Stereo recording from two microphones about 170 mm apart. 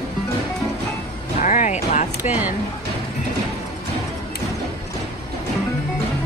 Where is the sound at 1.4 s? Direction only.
45° left (ahead or behind).